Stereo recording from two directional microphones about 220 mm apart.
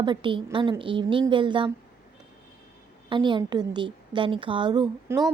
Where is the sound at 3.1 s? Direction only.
20° right (ahead or behind).